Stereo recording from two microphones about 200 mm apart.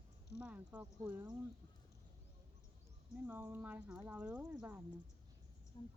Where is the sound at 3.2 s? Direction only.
10° right (ahead or behind).